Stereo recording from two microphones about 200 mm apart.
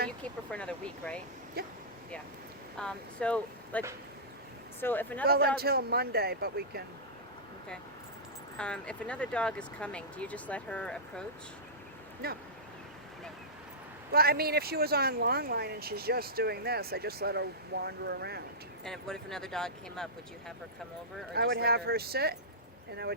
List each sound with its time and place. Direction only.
0.2 s speech: 5° left (ahead or behind)
1.6 s speech: 50° right (ahead or behind)
2.7 s speech: 5° left (ahead or behind)
5.2 s speech: 50° right (ahead or behind)
8.5 s speech: 5° left (ahead or behind)
12.2 s speech: 50° right (ahead or behind)
14.1 s speech: 50° right (ahead or behind)
18.9 s speech: 5° left (ahead or behind)
21.3 s speech: 50° right (ahead or behind)